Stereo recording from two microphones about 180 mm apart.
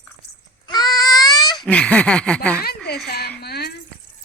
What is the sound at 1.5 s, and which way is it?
Speech, 5° left (ahead or behind).